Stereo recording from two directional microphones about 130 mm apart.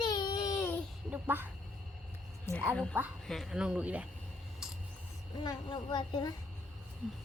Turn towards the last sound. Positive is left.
turn(degrees=35)  # may be behind; listen again after turning